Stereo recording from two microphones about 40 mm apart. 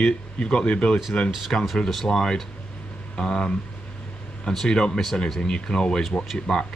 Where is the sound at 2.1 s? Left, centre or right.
Centre.